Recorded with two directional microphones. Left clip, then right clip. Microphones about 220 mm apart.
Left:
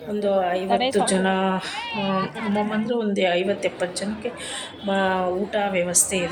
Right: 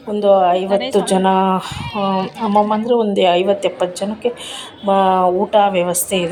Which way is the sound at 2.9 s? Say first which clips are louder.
Right 8 dB; 20° right (ahead or behind).